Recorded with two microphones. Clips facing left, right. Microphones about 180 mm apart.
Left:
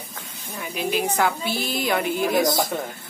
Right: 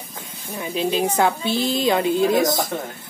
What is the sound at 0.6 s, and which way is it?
Speech, 25° right (ahead or behind).